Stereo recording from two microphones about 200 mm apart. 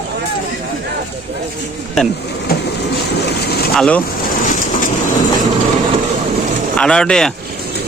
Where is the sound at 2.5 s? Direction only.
50° left (ahead or behind).